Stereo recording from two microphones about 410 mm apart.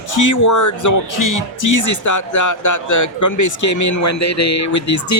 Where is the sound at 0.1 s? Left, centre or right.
Left.